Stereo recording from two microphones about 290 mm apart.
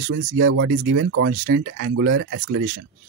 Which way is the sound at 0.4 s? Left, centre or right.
Right.